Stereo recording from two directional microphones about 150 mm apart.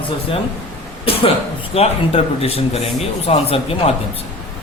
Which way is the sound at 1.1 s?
40° left (ahead or behind).